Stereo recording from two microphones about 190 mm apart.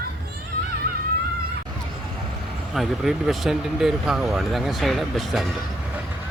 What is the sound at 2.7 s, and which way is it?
Speech, centre (ahead or behind).